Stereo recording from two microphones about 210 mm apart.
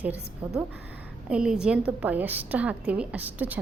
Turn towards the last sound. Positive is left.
turn(degrees=-10)  # may be behind; listen again after turning